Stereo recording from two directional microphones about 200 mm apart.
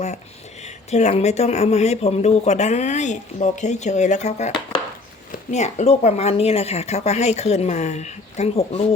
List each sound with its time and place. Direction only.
0.6 s speech: 35° left (ahead or behind)